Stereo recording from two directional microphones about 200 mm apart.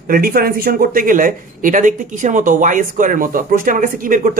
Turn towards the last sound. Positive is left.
turn(degrees=-45)  # may be behind; listen again after turning